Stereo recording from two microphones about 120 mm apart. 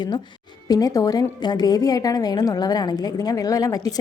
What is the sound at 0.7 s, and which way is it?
A woman's voice, 30° left (ahead or behind).